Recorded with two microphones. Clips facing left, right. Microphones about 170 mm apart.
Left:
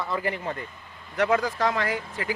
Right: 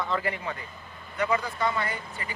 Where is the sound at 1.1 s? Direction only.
85° left.